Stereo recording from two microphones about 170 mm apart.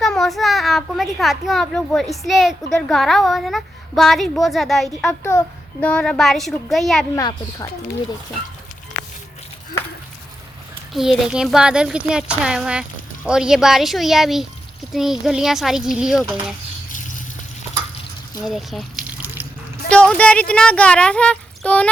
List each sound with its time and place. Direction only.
0.0 s a child's voice: centre (ahead or behind)
7.2 s speech: 20° left (ahead or behind)
10.9 s a child's voice: centre (ahead or behind)
18.4 s speech: centre (ahead or behind)